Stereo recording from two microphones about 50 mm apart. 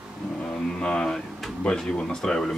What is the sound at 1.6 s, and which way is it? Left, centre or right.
Speech, centre.